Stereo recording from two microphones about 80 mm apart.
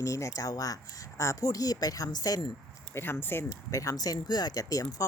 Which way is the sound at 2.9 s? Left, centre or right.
Left.